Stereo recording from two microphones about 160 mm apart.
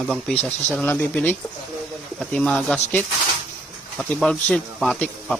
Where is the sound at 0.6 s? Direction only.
10° left (ahead or behind).